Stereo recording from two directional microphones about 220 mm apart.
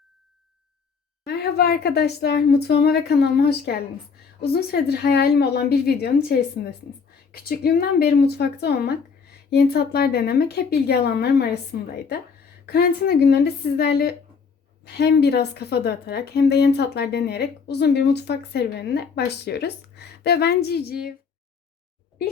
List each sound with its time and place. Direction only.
1.2 s a woman's voice: 45° left (ahead or behind)